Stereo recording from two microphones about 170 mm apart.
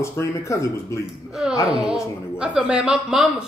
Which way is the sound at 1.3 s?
Centre (ahead or behind).